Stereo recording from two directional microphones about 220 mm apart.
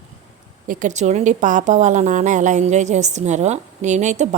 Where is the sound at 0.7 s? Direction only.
35° right (ahead or behind).